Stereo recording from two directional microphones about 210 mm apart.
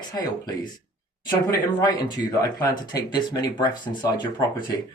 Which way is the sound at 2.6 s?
20° left (ahead or behind).